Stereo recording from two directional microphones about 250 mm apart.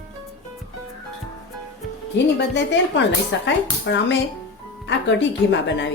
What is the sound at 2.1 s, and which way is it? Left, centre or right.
A woman's voice, left.